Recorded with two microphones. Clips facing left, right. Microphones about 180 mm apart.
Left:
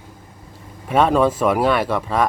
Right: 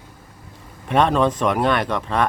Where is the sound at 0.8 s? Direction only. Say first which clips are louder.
Left 2 dB; 5° left (ahead or behind).